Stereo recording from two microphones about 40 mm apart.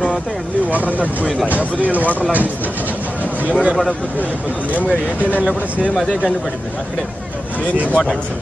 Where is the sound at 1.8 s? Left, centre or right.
Right.